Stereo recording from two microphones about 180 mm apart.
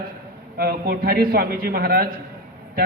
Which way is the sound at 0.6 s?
60° right (ahead or behind).